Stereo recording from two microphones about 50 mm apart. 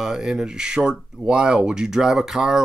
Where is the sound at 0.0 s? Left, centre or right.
Centre.